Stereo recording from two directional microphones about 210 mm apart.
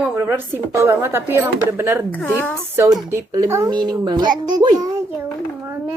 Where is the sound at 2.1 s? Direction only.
10° left (ahead or behind).